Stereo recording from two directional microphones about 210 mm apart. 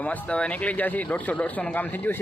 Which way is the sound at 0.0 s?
5° left (ahead or behind).